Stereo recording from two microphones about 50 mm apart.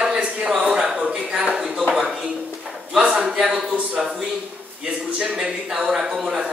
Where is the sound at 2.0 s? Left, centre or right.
Centre.